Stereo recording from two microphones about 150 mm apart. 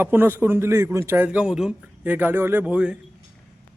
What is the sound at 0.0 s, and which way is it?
A man's voice, 15° right (ahead or behind).